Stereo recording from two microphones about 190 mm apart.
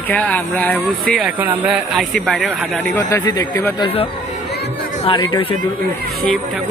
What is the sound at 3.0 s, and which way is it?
Speech, 20° left (ahead or behind).